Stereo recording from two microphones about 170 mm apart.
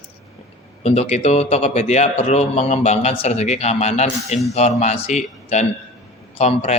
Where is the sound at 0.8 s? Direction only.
40° left (ahead or behind).